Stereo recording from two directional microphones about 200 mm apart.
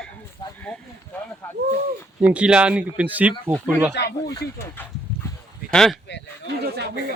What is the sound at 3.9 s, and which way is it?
Speech, 55° left (ahead or behind).